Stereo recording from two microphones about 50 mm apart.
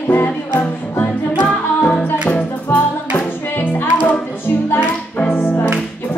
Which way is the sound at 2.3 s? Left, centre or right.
Left.